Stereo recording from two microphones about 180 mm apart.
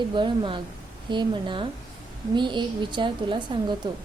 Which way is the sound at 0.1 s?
25° right (ahead or behind).